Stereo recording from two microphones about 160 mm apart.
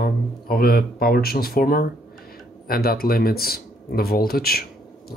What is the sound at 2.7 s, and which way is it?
Speech, 70° left (ahead or behind).